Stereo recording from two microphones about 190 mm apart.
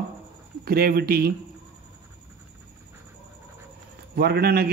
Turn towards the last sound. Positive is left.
turn(degrees=-55)  # may be behind; listen again after turning